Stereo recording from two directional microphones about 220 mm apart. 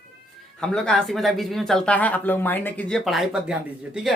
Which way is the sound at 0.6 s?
5° left (ahead or behind).